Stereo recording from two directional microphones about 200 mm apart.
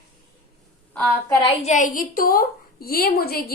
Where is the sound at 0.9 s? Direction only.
5° left (ahead or behind).